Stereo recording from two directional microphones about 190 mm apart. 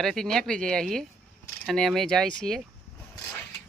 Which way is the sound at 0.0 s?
Centre (ahead or behind).